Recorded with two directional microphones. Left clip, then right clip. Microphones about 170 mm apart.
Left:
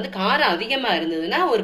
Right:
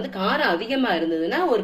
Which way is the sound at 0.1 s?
30° right (ahead or behind).